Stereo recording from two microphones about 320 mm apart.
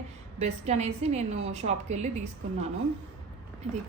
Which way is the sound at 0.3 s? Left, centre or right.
Right.